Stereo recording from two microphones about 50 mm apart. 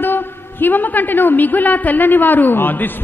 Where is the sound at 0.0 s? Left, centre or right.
Left.